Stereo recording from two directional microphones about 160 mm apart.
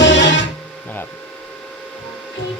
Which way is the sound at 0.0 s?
90° left.